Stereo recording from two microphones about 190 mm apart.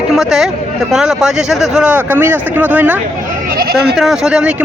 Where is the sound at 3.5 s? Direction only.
50° right (ahead or behind).